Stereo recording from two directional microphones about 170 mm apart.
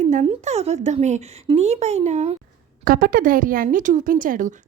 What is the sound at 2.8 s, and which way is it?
A woman's voice, 55° right (ahead or behind).